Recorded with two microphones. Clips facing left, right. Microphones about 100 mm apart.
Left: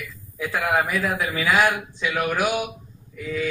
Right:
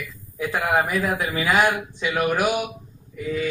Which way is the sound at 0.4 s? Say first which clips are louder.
Right 1 dB; 15° right (ahead or behind).